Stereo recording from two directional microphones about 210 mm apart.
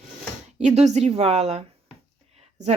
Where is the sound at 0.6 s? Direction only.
30° right (ahead or behind).